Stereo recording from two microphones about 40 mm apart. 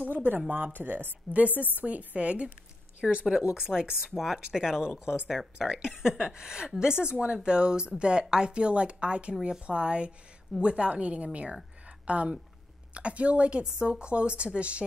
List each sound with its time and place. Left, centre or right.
0.0 s a sound: right
0.7 s a woman's voice: right
3.3 s speech: centre
5.0 s a woman's voice: right
5.4 s a woman's voice: centre; by 14.9 s right